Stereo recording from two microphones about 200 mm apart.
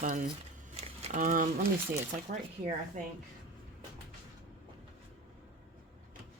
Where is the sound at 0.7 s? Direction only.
35° right (ahead or behind).